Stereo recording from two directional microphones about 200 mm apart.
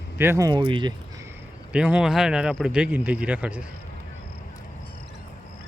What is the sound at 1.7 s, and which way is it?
Speech, 5° right (ahead or behind).